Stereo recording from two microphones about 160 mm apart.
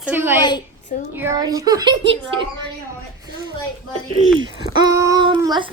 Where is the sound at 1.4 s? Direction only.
25° right (ahead or behind).